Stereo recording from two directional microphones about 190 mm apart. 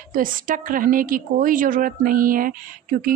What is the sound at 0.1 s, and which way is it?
Speech, 45° right (ahead or behind).